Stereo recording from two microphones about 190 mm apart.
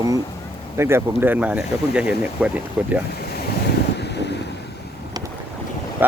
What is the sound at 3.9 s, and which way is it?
Wind noise, 60° left (ahead or behind).